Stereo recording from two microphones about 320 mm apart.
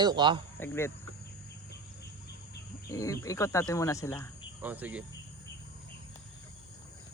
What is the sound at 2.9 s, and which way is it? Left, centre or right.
Speech, centre.